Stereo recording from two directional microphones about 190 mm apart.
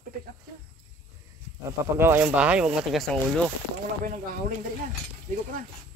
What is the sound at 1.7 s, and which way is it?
Speech, 10° right (ahead or behind).